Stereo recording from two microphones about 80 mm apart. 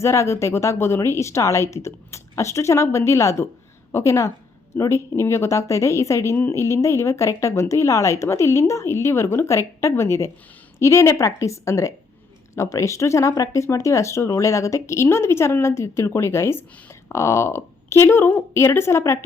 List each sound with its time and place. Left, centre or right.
0.0 s speech: left